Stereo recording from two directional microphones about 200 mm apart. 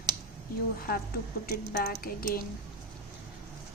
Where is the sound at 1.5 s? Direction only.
50° left (ahead or behind).